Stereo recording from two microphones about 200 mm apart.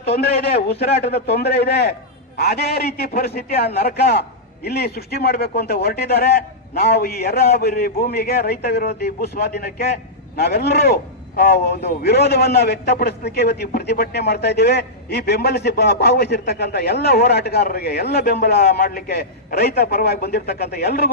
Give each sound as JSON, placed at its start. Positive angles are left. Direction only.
{"t": 0.7, "sound": "a man's voice", "side_deg": 55}